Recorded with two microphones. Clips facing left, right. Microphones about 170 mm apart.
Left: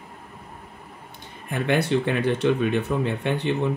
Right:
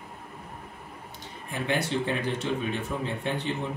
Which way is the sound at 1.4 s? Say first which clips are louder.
Left 6 dB; 60° left (ahead or behind).